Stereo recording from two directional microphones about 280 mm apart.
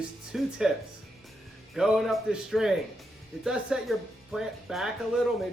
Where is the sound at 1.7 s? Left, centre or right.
Centre.